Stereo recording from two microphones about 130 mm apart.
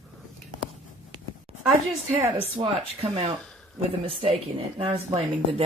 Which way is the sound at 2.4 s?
50° right (ahead or behind).